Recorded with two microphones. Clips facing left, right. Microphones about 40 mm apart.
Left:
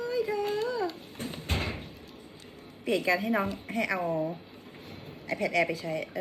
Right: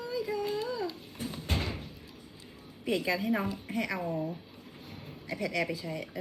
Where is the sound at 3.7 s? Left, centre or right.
Centre.